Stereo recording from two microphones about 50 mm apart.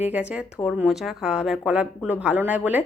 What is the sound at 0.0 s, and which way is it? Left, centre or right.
Speech, right.